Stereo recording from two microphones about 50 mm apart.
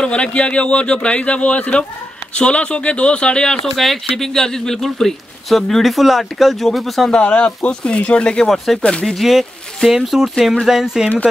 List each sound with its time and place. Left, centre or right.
0.0 s speech: left
3.7 s speech: centre
7.1 s speech: left
8.7 s speech: centre